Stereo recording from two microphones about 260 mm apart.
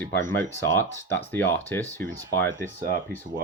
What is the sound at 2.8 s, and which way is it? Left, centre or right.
Speech, right.